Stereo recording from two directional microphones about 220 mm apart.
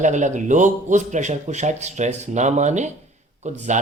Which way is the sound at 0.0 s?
35° right (ahead or behind).